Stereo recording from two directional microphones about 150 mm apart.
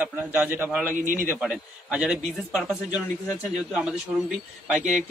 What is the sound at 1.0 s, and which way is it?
Speech, 65° right (ahead or behind).